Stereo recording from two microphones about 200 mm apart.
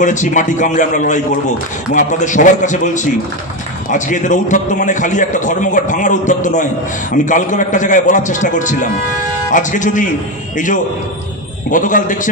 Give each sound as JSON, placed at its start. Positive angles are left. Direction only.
{"t": 0.0, "sound": "a man's voice", "side_deg": 40}
{"t": 11.7, "sound": "a man's voice", "side_deg": 40}